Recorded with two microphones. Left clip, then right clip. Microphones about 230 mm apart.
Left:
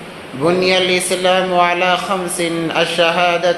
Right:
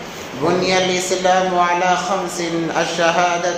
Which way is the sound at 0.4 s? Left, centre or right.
Left.